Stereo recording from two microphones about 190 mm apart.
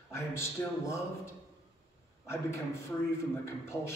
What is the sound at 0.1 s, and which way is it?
Speech, 15° left (ahead or behind).